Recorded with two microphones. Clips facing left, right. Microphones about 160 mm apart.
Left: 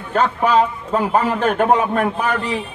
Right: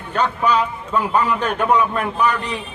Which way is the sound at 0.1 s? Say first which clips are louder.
Left 3 dB; 45° left (ahead or behind).